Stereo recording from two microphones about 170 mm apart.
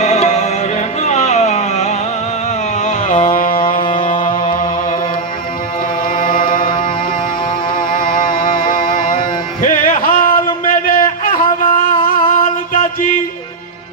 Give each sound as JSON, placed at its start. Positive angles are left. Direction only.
{"t": 0.0, "sound": "music", "side_deg": 40}
{"t": 6.1, "sound": "chant", "side_deg": 55}
{"t": 7.8, "sound": "music", "side_deg": 55}